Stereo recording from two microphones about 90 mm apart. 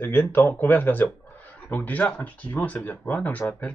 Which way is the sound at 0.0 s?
20° left (ahead or behind).